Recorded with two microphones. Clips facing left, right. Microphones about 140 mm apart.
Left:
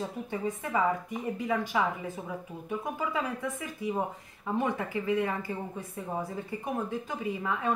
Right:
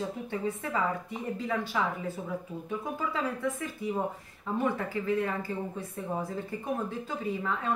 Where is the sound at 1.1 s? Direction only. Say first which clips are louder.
Left 2 dB; 15° left (ahead or behind).